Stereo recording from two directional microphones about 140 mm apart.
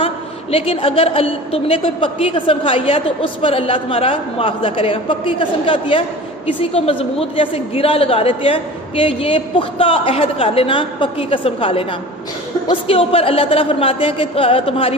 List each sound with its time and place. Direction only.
0.5 s a woman's voice: 45° left (ahead or behind)
12.9 s a woman's voice: 40° left (ahead or behind)